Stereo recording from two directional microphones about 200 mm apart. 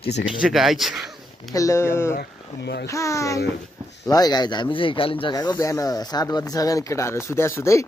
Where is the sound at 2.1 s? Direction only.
55° left (ahead or behind).